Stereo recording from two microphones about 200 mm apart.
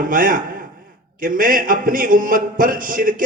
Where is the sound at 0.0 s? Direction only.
45° right (ahead or behind).